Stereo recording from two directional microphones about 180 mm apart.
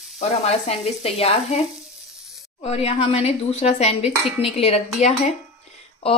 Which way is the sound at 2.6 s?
35° left (ahead or behind).